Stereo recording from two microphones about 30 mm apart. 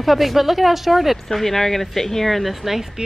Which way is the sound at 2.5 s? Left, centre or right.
Centre.